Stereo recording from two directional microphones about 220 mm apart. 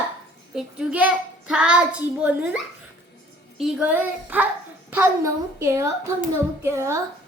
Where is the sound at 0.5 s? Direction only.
5° right (ahead or behind).